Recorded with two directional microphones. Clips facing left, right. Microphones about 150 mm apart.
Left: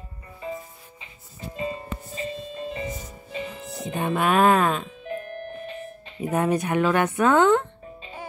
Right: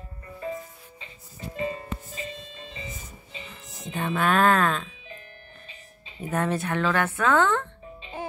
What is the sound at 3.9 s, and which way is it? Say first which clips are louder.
Speech: left 2 dB; 10° left (ahead or behind).